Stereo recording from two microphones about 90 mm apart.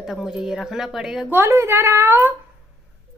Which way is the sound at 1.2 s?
25° right (ahead or behind).